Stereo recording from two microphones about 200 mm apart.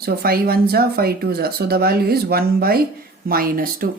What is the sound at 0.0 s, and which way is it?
Speech, 50° right (ahead or behind).